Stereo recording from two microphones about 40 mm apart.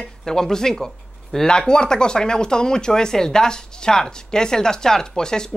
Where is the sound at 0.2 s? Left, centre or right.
Centre.